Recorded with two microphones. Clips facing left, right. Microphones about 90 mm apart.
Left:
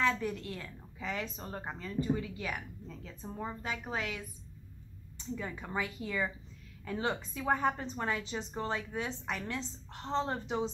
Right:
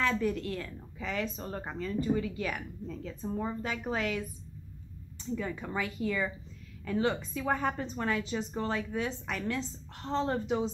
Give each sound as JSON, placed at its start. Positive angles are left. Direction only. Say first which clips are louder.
{"t": 0.0, "sound": "a woman's voice", "louder": "right 2 dB", "side_deg": 15}
{"t": 5.3, "sound": "a woman's voice", "louder": "right 3 dB", "side_deg": 10}